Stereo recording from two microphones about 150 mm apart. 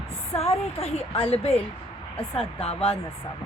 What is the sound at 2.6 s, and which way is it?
Speech, 40° left (ahead or behind).